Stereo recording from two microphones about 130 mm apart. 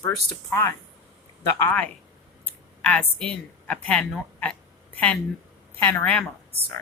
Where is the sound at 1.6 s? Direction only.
15° left (ahead or behind).